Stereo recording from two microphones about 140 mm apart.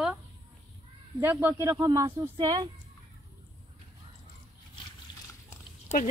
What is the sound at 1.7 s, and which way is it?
Speech, 25° right (ahead or behind).